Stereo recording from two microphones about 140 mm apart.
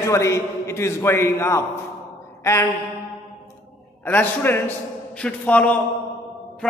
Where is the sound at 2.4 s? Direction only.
20° left (ahead or behind).